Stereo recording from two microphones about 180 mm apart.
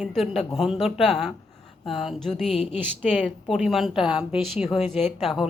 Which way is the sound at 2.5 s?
35° left (ahead or behind).